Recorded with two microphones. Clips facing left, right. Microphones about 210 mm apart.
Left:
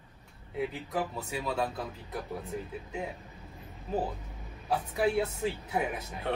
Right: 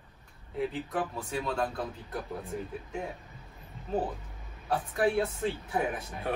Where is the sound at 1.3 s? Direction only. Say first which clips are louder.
Right 1 dB; 5° left (ahead or behind).